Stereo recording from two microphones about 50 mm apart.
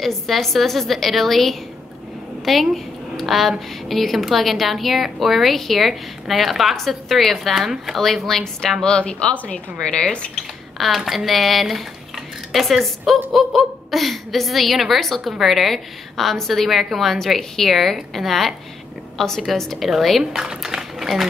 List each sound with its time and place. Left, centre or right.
0.0 s a woman's voice: centre
8.8 s speech: centre
11.1 s a woman's voice: centre